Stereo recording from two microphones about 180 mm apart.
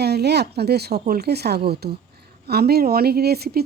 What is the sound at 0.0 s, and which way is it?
Speech, 65° right (ahead or behind).